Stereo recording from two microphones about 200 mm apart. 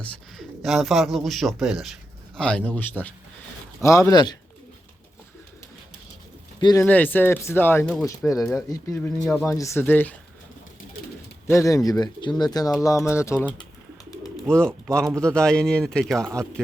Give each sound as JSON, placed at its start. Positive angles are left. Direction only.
{"t": 0.0, "sound": "speech", "side_deg": 0}
{"t": 3.8, "sound": "speech", "side_deg": 15}
{"t": 6.6, "sound": "speech", "side_deg": 20}
{"t": 6.8, "sound": "speech", "side_deg": 10}
{"t": 11.4, "sound": "speech", "side_deg": 15}
{"t": 14.5, "sound": "speech", "side_deg": 5}